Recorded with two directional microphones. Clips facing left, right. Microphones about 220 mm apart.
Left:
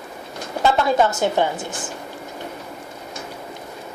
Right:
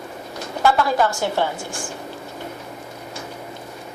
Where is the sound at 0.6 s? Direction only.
20° left (ahead or behind).